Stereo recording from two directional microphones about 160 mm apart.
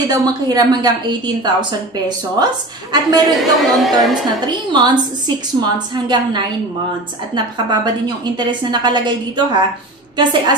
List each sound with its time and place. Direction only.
0.5 s a woman's voice: 25° right (ahead or behind)
3.3 s a woman's voice: centre (ahead or behind)
4.5 s a woman's voice: 25° right (ahead or behind)